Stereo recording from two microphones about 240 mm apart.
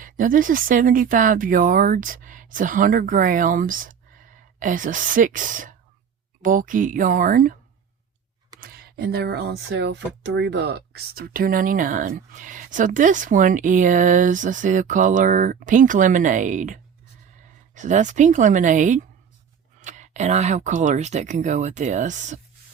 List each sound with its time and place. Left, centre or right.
0.0 s speech: right
8.6 s speech: right